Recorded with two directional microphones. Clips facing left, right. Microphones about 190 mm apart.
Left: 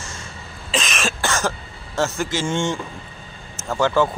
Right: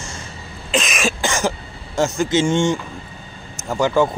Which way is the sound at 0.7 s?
5° right (ahead or behind).